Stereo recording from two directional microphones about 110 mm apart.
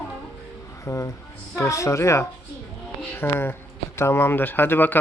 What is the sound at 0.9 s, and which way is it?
A woman's voice, 30° left (ahead or behind).